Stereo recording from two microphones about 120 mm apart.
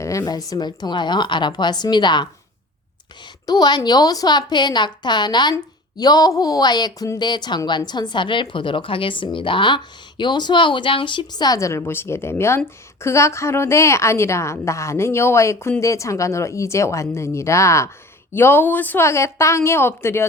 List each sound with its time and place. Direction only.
0.0 s speech: 25° left (ahead or behind)
3.4 s a woman's voice: 35° left (ahead or behind)